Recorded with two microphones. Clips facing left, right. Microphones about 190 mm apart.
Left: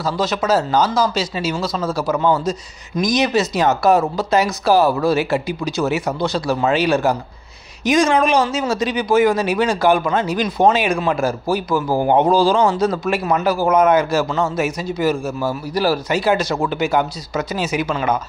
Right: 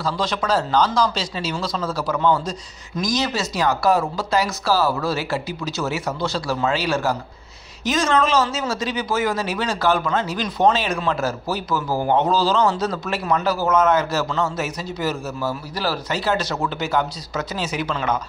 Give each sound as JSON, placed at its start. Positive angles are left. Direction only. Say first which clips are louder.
{"t": 0.0, "sound": "speech", "louder": "left 4 dB", "side_deg": 5}